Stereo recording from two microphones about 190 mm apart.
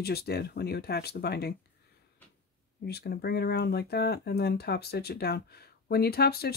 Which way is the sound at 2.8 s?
55° left (ahead or behind).